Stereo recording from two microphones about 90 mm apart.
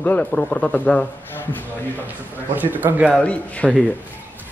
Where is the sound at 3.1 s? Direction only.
15° left (ahead or behind).